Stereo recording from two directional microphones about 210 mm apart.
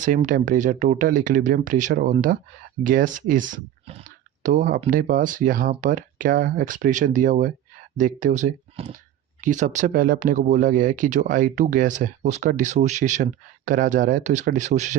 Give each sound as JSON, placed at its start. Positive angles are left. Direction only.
{"t": 0.0, "sound": "speech", "side_deg": -40}